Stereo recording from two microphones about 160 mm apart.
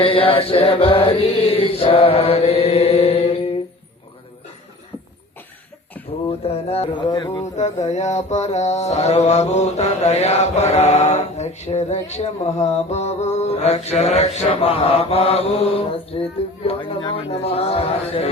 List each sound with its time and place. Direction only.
0.0 s mantra: 35° left (ahead or behind)
6.4 s mantra: 40° left (ahead or behind)
7.1 s speech: 25° left (ahead or behind)
7.5 s mantra: 45° left (ahead or behind)